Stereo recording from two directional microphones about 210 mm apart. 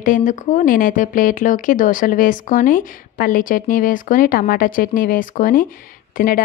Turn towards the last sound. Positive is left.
turn(degrees=40)  # may be behind; listen again after turning